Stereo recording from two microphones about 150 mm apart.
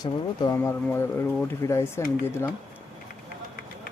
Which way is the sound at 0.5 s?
15° left (ahead or behind).